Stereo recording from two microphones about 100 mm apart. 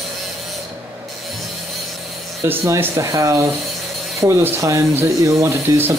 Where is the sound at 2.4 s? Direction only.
25° right (ahead or behind).